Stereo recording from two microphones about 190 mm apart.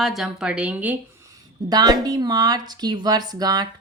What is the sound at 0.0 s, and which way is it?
Speech, centre (ahead or behind).